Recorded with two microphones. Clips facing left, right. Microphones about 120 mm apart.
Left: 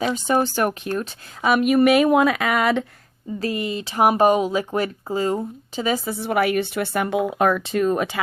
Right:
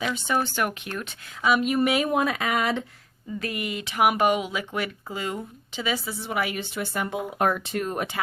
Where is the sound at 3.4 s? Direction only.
30° left (ahead or behind).